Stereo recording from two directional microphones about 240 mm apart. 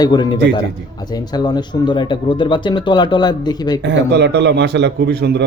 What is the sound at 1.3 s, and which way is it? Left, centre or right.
Speech, centre.